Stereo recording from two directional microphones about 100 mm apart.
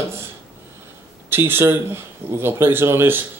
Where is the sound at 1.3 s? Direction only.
25° right (ahead or behind).